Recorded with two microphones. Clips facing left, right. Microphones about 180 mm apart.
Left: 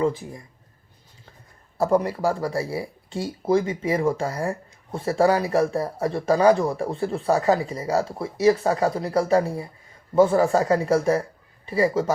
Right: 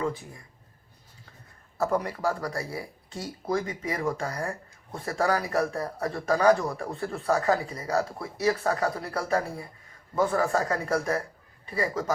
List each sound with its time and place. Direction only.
1.8 s speech: 30° left (ahead or behind)